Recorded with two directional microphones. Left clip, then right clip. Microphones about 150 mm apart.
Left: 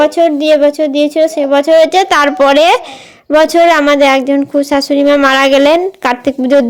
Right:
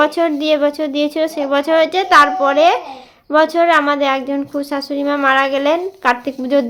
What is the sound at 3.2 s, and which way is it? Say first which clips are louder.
A woman's voice: left 5 dB; 50° left (ahead or behind).